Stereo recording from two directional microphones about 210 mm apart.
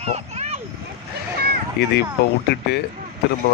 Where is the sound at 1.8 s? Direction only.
50° left (ahead or behind).